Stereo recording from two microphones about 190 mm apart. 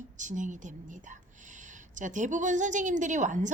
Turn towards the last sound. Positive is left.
turn(degrees=-40)  # may be behind; listen again after turning